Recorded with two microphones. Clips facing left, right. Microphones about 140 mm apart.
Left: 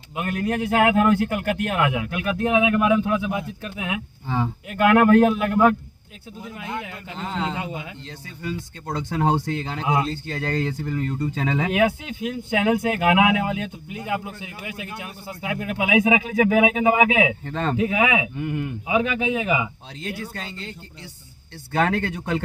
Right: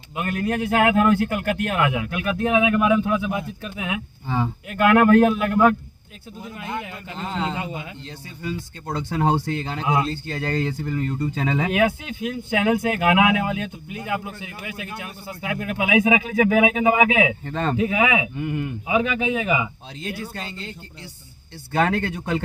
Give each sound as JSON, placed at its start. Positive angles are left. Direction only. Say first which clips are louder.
{"t": 0.2, "sound": "a man's voice", "louder": "even", "side_deg": 20}
{"t": 7.2, "sound": "speech", "louder": "right 1 dB", "side_deg": 0}
{"t": 11.7, "sound": "a man's voice", "louder": "even", "side_deg": 25}
{"t": 17.4, "sound": "speech", "louder": "right 1 dB", "side_deg": -10}
{"t": 17.7, "sound": "speech", "louder": "even", "side_deg": 15}
{"t": 18.3, "sound": "speech", "louder": "right 1 dB", "side_deg": -10}
{"t": 18.9, "sound": "speech", "louder": "even", "side_deg": 15}
{"t": 20.3, "sound": "speech", "louder": "right 1 dB", "side_deg": -5}